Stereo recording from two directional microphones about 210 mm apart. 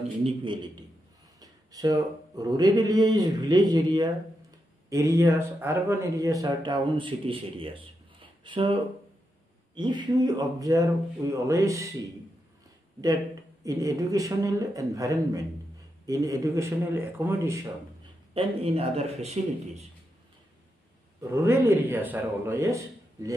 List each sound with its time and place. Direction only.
0.2 s speech: 25° right (ahead or behind)
13.7 s speech: 15° right (ahead or behind)
18.3 s speech: 25° right (ahead or behind)
21.2 s speech: 10° right (ahead or behind)